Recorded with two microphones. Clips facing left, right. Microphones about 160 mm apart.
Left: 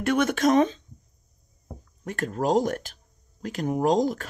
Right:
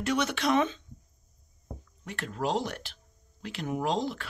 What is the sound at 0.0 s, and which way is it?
Speech, 50° left (ahead or behind).